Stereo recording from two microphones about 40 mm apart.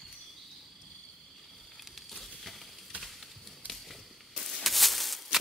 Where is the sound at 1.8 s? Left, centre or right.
Centre.